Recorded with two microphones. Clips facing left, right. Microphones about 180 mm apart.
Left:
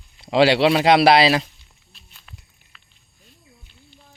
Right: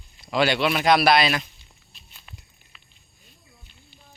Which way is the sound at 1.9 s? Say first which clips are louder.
Left 1 dB; centre (ahead or behind).